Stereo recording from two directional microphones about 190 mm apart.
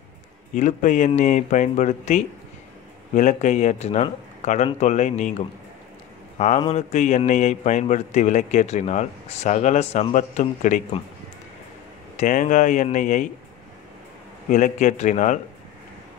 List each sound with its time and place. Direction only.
0.6 s a man's voice: 40° left (ahead or behind)
6.3 s a man's voice: 35° left (ahead or behind)
12.2 s a man's voice: 40° left (ahead or behind)
14.5 s a man's voice: 40° left (ahead or behind)